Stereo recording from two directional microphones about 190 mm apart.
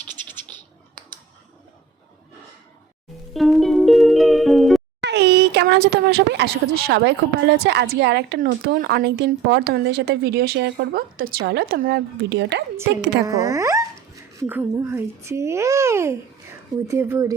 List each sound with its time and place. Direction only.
0.0 s scratch: 10° left (ahead or behind)
3.3 s music: centre (ahead or behind)
4.9 s speech: 65° right (ahead or behind)
8.4 s a woman's voice: 50° right (ahead or behind)
13.2 s a child's voice: 15° right (ahead or behind)